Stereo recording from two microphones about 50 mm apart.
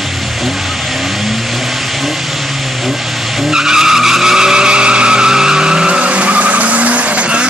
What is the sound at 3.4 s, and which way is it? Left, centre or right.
Vehicle, centre.